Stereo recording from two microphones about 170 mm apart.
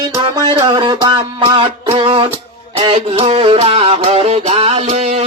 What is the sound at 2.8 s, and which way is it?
Music, 35° right (ahead or behind).